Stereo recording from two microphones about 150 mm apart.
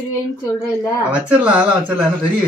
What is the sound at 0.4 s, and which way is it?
Speech, 20° left (ahead or behind).